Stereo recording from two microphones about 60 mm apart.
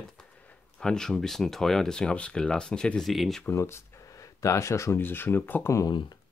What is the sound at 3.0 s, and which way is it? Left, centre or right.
Speech, centre.